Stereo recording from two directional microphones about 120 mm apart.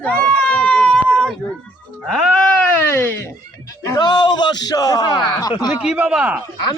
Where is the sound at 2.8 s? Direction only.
20° left (ahead or behind).